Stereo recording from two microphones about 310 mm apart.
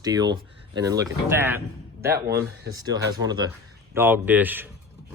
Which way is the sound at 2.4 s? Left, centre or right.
Centre.